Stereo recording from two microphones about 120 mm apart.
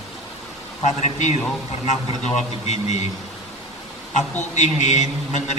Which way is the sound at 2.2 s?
75° left (ahead or behind).